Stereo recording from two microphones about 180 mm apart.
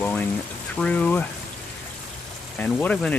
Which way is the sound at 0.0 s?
10° left (ahead or behind).